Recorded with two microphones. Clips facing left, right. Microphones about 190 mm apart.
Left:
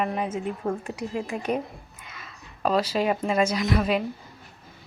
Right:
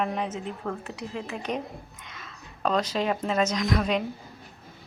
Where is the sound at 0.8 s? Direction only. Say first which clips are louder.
Left 4 dB; 45° left (ahead or behind).